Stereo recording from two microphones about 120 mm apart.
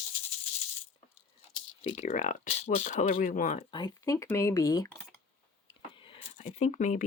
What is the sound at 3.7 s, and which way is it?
Speech, 40° left (ahead or behind).